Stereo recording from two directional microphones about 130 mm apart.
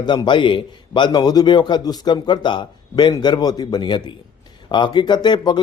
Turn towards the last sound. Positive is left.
turn(degrees=35)  # may be behind; listen again after turning